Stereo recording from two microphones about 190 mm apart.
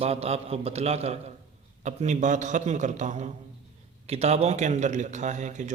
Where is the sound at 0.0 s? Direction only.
35° right (ahead or behind).